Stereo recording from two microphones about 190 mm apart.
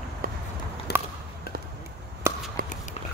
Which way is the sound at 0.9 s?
60° left (ahead or behind).